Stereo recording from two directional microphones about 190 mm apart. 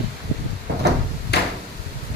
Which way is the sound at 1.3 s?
60° left (ahead or behind).